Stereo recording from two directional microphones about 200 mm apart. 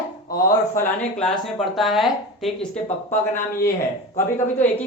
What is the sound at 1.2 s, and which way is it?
A woman's voice, 5° left (ahead or behind).